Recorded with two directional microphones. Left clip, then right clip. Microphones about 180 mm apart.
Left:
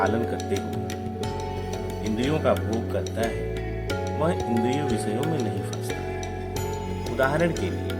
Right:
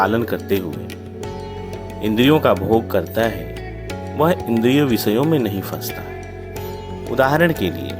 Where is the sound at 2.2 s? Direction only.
50° right (ahead or behind).